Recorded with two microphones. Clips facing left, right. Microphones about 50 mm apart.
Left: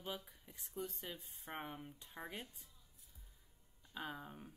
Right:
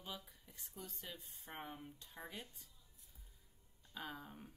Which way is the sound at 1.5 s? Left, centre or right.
Centre.